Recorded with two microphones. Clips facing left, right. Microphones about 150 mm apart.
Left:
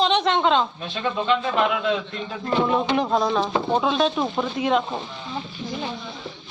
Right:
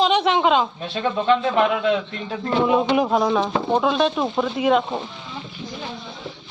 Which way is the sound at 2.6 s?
10° right (ahead or behind).